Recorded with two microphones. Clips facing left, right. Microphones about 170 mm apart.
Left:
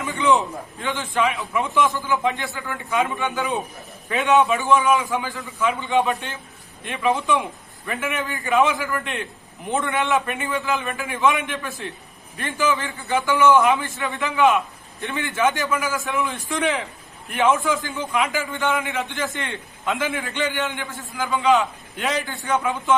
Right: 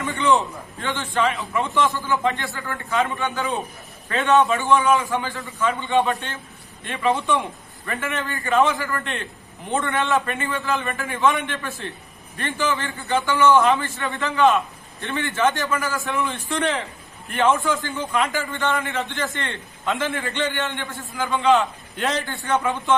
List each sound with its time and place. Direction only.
0.0 s a man's voice: centre (ahead or behind)
8.9 s a man's voice: 5° left (ahead or behind)
10.0 s a man's voice: 15° left (ahead or behind)
16.0 s a man's voice: centre (ahead or behind)